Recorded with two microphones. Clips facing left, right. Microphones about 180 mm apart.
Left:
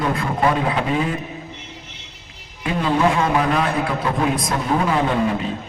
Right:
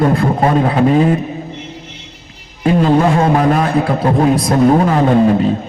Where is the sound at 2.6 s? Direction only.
45° right (ahead or behind).